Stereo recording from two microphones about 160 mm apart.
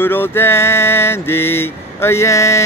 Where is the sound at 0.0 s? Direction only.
15° left (ahead or behind).